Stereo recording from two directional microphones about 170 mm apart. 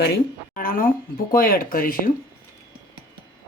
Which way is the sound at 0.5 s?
55° left (ahead or behind).